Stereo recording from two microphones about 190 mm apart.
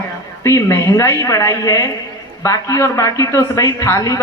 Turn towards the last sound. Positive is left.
turn(degrees=20)  # may be behind; listen again after turning